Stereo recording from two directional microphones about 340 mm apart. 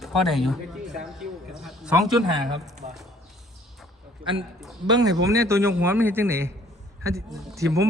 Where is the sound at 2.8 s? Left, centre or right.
Right.